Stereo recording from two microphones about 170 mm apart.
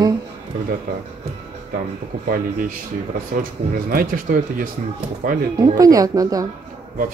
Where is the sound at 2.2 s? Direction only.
55° right (ahead or behind).